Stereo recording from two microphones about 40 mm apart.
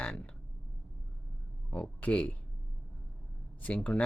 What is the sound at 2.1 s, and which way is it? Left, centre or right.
Speech, left.